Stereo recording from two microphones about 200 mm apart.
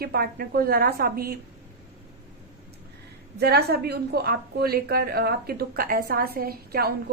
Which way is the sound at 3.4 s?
55° right (ahead or behind).